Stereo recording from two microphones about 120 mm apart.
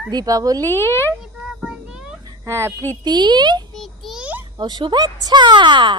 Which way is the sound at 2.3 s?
25° right (ahead or behind).